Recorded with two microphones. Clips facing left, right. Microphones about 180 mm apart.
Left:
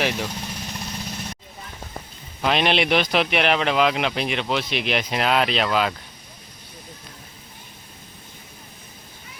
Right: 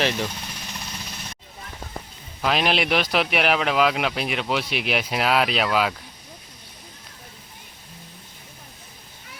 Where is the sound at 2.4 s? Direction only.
Centre (ahead or behind).